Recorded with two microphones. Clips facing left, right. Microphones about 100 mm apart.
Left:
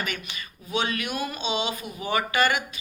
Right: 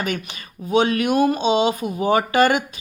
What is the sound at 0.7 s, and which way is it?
Speech, 40° right (ahead or behind).